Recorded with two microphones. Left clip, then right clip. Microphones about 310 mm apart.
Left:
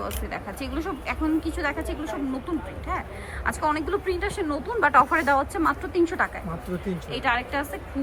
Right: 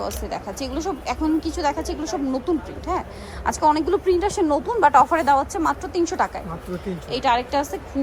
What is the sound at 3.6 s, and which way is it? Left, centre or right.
A woman's voice, centre.